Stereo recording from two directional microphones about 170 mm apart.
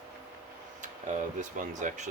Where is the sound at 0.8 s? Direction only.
45° right (ahead or behind).